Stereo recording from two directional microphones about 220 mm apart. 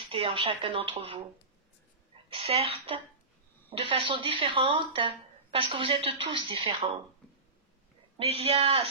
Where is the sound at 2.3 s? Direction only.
25° right (ahead or behind).